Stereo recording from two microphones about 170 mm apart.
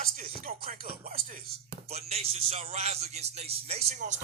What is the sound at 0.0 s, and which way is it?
Music, 55° right (ahead or behind).